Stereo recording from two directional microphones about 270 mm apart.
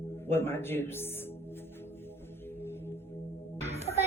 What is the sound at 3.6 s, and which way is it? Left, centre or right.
Music, right.